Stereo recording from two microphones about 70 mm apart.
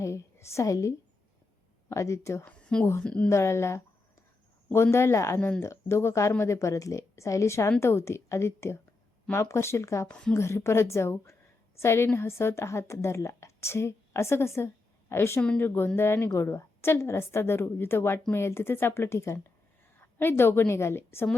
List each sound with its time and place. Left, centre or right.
0.0 s a woman's voice: left
2.4 s a woman's voice: centre
3.2 s a woman's voice: left
10.1 s a woman's voice: centre
10.3 s a woman's voice: left
15.4 s a woman's voice: centre
15.6 s a woman's voice: left
20.0 s a woman's voice: left